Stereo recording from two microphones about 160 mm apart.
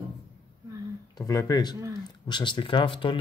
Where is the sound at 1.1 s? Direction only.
20° left (ahead or behind).